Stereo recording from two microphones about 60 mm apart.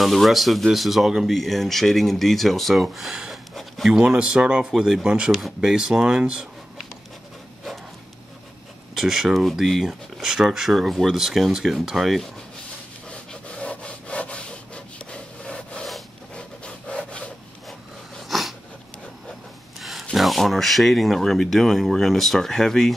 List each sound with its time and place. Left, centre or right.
0.0 s speech: centre
3.9 s speech: centre
4.6 s speech: centre
8.9 s speech: centre
13.1 s rub: centre
15.0 s wood: centre
18.3 s a sound: centre
19.8 s a sound: centre
20.2 s speech: centre